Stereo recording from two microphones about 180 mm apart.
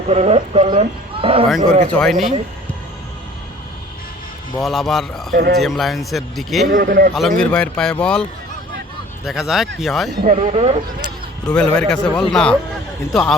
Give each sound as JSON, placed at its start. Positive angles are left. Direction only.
{"t": 0.1, "sound": "speech", "side_deg": -35}
{"t": 1.5, "sound": "speech", "side_deg": 0}
{"t": 4.6, "sound": "speech", "side_deg": 0}
{"t": 5.3, "sound": "speech", "side_deg": -60}
{"t": 5.5, "sound": "speech", "side_deg": 0}
{"t": 6.7, "sound": "a man's voice", "side_deg": -50}
{"t": 7.1, "sound": "speech", "side_deg": 0}
{"t": 9.2, "sound": "speech", "side_deg": 0}
{"t": 10.2, "sound": "speech", "side_deg": -40}
{"t": 11.5, "sound": "speech", "side_deg": 5}